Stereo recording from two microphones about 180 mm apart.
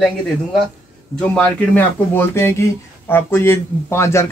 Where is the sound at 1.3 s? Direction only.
10° left (ahead or behind).